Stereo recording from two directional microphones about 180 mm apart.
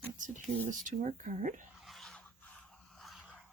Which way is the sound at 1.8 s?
Centre (ahead or behind).